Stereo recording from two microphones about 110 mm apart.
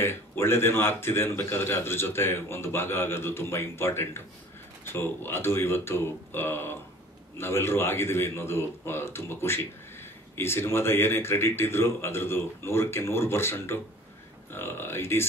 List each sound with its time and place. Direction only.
0.0 s speech: 20° left (ahead or behind)